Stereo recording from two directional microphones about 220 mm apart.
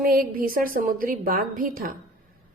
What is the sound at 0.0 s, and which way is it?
A woman's voice, 40° right (ahead or behind).